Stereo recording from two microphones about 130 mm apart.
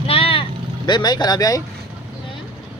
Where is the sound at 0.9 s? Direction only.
35° left (ahead or behind).